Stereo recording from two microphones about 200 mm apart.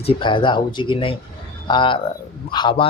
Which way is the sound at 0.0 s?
25° left (ahead or behind).